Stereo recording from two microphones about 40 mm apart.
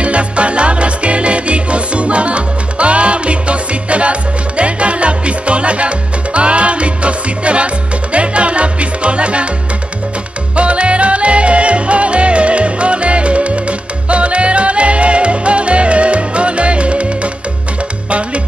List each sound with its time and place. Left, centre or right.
0.0 s music: right
10.5 s music: right